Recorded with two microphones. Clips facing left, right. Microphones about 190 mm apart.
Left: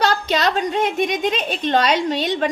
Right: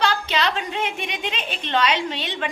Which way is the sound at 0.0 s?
40° left (ahead or behind).